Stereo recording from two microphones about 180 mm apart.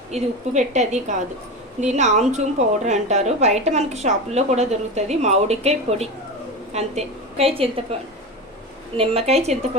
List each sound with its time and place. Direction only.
0.1 s a woman's voice: 40° right (ahead or behind)
9.0 s a woman's voice: 35° right (ahead or behind)